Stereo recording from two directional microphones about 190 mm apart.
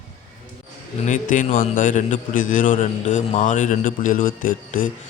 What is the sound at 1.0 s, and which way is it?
A man's voice, 40° left (ahead or behind).